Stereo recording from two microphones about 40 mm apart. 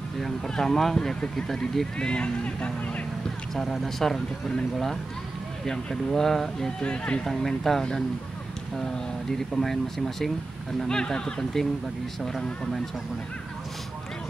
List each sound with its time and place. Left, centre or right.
0.2 s speech: centre; by 2.7 s left
3.7 s speech: centre
5.7 s speech: centre
6.8 s speech: left
7.2 s speech: centre
9.5 s speech: centre